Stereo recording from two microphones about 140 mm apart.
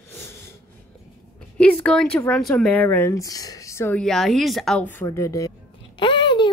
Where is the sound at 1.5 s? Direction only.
10° left (ahead or behind).